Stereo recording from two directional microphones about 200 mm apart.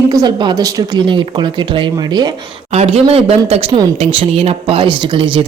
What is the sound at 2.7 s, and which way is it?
A man's voice, 30° right (ahead or behind).